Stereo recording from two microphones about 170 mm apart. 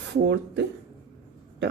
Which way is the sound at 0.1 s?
90° right.